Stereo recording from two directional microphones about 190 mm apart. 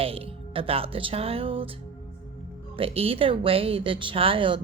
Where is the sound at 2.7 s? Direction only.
30° right (ahead or behind).